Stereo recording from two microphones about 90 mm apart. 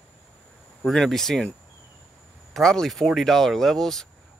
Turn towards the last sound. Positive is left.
turn(degrees=5)  # may be behind; listen again after turning